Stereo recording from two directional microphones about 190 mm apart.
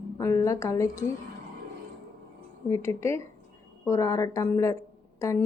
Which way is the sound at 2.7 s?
15° left (ahead or behind).